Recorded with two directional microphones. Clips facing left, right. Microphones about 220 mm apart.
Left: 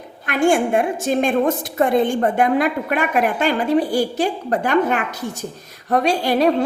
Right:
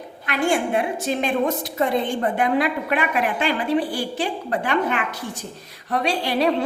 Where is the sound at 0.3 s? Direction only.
50° left (ahead or behind).